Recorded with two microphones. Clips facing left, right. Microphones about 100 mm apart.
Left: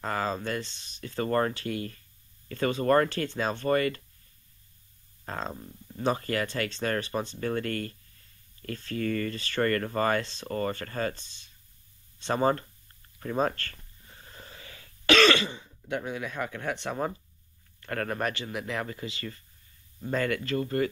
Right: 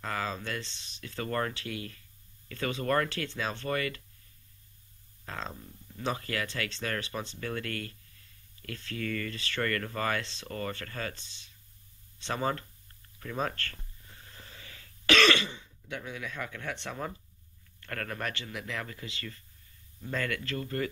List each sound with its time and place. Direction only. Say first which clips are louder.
0.0 s speech: left 4 dB; 30° left (ahead or behind)
3.1 s speech: left 5 dB; 35° left (ahead or behind)
5.2 s speech: left 4 dB; 30° left (ahead or behind)
7.4 s speech: left 5 dB; 30° left (ahead or behind)
8.9 s speech: left 5 dB; 30° left (ahead or behind)
12.3 s speech: left 6 dB; 35° left (ahead or behind)
14.1 s cough: left 4 dB; 20° left (ahead or behind)
15.4 s a man's voice: left 5 dB; 40° left (ahead or behind)
16.3 s speech: left 5 dB; 20° left (ahead or behind)
17.8 s speech: left 6 dB; 20° left (ahead or behind)
20.2 s speech: left 6 dB; 15° left (ahead or behind)